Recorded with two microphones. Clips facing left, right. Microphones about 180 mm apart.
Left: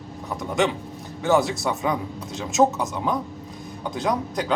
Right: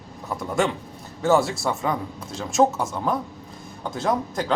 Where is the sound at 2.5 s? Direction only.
Centre (ahead or behind).